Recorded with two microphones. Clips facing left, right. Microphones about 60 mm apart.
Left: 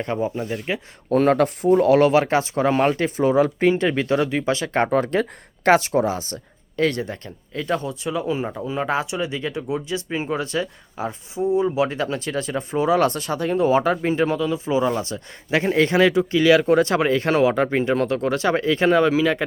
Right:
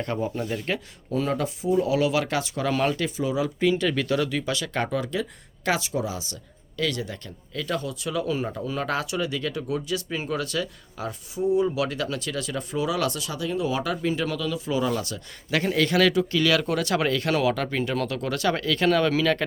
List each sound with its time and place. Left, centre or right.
0.0 s speech: left
1.1 s speech: left
3.2 s speech: left; by 19.5 s centre